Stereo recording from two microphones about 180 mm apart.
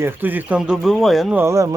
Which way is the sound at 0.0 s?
10° right (ahead or behind).